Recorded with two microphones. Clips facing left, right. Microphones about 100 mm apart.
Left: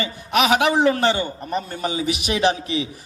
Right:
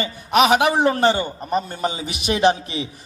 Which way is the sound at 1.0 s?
20° right (ahead or behind).